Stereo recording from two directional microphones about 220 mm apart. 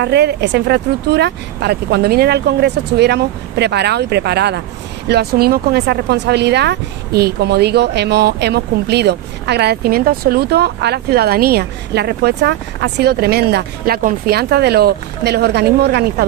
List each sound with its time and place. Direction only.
0.0 s speech: 50° right (ahead or behind)